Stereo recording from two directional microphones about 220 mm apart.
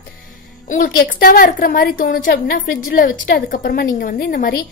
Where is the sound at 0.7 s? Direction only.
40° left (ahead or behind).